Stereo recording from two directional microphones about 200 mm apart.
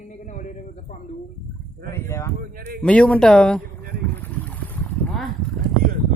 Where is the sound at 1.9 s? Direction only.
15° left (ahead or behind).